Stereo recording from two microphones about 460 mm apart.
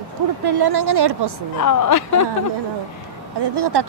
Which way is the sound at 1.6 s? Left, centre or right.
Left.